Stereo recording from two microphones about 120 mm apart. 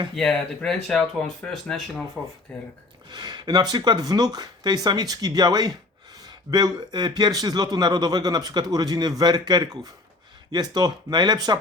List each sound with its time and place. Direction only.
0.2 s speech: 5° left (ahead or behind)
3.1 s a man's voice: 35° right (ahead or behind)